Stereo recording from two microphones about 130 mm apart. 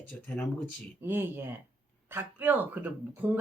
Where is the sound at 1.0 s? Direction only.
15° right (ahead or behind).